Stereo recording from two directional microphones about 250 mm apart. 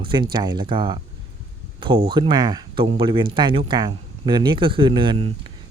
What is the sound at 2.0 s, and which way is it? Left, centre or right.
Speech, centre.